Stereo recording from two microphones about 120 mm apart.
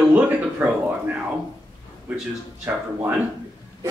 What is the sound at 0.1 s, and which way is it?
Speech, 15° right (ahead or behind).